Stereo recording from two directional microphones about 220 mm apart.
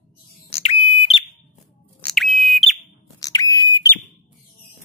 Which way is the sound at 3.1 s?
15° left (ahead or behind).